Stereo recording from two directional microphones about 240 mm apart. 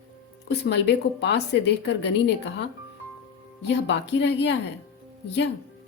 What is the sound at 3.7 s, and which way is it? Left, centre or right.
Speech, left.